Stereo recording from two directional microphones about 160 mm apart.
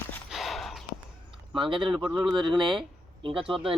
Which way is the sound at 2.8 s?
30° right (ahead or behind).